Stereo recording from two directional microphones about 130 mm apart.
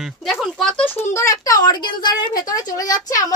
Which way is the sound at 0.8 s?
20° left (ahead or behind).